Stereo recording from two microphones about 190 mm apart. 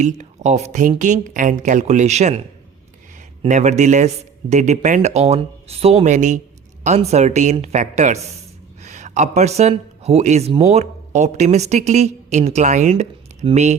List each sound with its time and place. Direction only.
0.0 s speech: 40° right (ahead or behind)
3.4 s speech: 40° right (ahead or behind)